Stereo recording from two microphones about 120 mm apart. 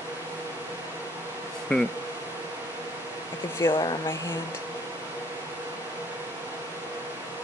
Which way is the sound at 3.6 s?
20° left (ahead or behind).